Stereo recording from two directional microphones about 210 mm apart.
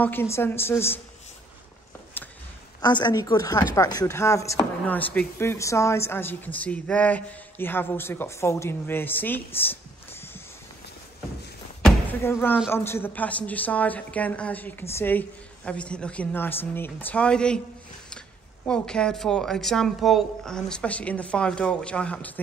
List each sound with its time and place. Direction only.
0.0 s speech: 10° left (ahead or behind)
2.2 s a sound: 10° left (ahead or behind)
2.8 s a woman's voice: 20° left (ahead or behind)
11.8 s a sound: 10° left (ahead or behind)
12.6 s speech: 10° left (ahead or behind)
18.7 s speech: 5° left (ahead or behind)